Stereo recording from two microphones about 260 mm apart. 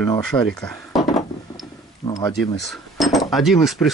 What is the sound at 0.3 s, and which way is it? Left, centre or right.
Speech, centre.